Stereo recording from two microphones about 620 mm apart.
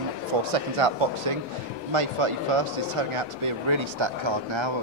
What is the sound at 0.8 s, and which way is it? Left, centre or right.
A man's voice, right.